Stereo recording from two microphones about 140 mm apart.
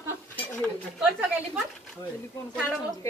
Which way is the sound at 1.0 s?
10° right (ahead or behind).